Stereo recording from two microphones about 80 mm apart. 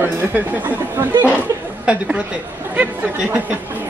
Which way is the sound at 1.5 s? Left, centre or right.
Right.